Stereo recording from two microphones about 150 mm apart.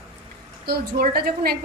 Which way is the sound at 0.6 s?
85° right.